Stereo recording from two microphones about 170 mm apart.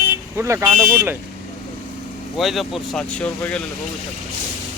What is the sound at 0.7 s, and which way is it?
Speech, 10° right (ahead or behind).